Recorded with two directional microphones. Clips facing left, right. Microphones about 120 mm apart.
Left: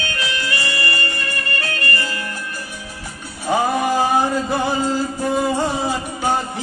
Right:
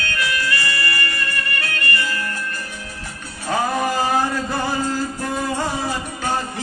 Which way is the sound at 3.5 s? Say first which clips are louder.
Left 3 dB; 15° left (ahead or behind).